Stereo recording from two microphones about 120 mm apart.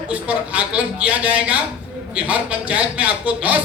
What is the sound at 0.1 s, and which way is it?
A man's voice, 10° right (ahead or behind).